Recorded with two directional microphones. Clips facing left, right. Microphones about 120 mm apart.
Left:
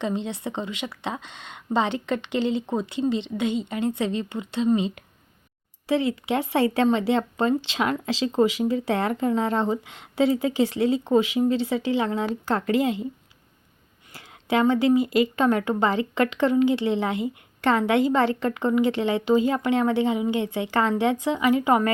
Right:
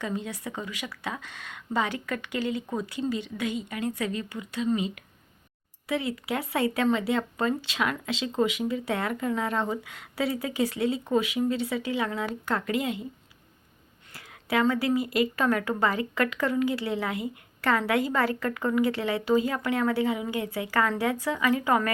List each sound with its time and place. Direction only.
0.0 s speech: 25° left (ahead or behind)
14.1 s speech: 25° left (ahead or behind)